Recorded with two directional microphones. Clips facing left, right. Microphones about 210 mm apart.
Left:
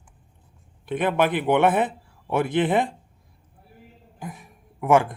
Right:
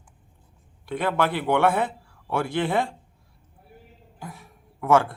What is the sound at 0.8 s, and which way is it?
A man's voice, 20° left (ahead or behind).